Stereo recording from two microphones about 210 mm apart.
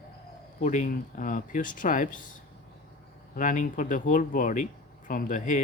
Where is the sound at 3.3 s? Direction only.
40° left (ahead or behind).